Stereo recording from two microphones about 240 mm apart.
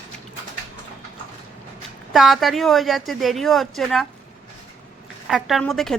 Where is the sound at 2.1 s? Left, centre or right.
Centre.